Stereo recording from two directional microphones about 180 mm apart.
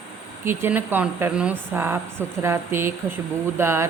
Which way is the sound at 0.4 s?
10° right (ahead or behind).